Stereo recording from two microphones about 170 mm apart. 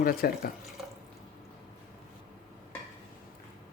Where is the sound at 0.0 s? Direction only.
60° left (ahead or behind).